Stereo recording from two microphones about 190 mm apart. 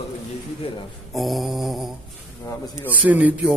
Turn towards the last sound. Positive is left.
turn(degrees=-10)  # may be behind; listen again after turning